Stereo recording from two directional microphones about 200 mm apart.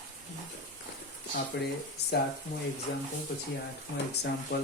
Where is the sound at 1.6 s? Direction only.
55° left (ahead or behind).